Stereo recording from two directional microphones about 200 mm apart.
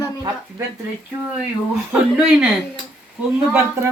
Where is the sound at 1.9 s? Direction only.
5° right (ahead or behind).